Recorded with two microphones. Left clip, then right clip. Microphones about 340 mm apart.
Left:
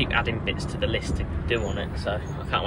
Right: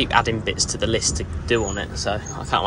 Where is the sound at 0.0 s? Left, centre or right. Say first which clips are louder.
Right 6 dB; centre.